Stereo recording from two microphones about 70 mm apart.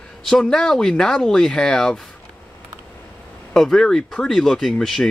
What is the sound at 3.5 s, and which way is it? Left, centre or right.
Speech, centre.